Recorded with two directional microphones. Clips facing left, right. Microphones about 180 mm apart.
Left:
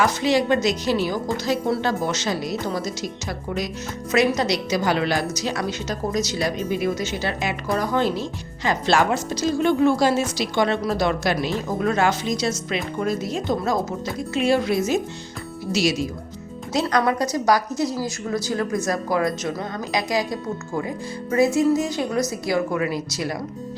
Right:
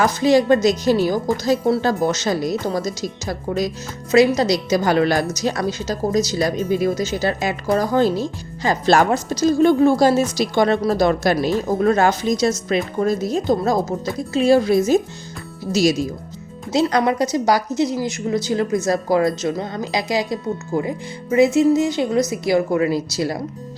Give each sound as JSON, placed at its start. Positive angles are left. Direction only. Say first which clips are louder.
{"t": 0.0, "sound": "speech", "louder": "right 4 dB", "side_deg": -40}
{"t": 16.7, "sound": "speech", "louder": "right 3 dB", "side_deg": -25}